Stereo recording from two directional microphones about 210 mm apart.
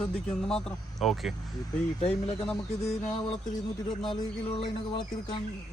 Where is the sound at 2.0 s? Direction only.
30° left (ahead or behind).